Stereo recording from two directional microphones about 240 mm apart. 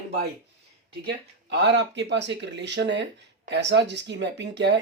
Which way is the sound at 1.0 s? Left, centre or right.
Right.